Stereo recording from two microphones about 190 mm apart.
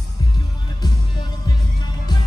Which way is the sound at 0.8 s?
20° left (ahead or behind).